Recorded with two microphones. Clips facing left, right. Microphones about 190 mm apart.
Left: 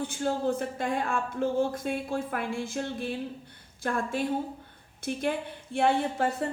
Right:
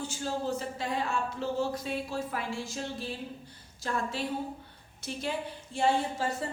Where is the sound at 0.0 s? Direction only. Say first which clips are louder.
Left 5 dB; 60° left (ahead or behind).